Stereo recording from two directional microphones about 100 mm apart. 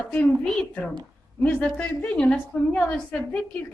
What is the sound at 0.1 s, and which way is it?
A woman's voice, 10° left (ahead or behind).